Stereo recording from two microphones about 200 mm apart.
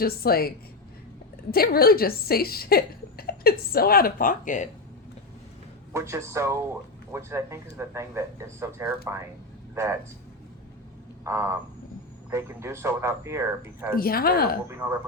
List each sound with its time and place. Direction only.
0.0 s speech: 50° left (ahead or behind)
5.9 s speech: 15° right (ahead or behind)
11.2 s frog: 15° right (ahead or behind)
12.3 s speech: 15° right (ahead or behind)
13.9 s speech: 50° left (ahead or behind)